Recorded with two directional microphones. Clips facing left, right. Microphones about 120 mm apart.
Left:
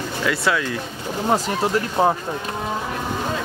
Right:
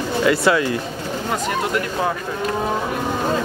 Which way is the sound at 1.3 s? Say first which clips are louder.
Left 2 dB; 30° left (ahead or behind).